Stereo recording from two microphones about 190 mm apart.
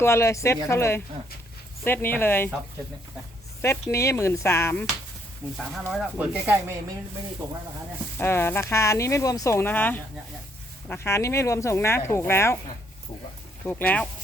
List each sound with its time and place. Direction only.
0.0 s speech: 15° left (ahead or behind)
3.6 s speech: 15° left (ahead or behind)
5.5 s speech: centre (ahead or behind)
7.4 s speech: 20° right (ahead or behind)
8.2 s speech: 10° left (ahead or behind)
13.7 s speech: 10° left (ahead or behind)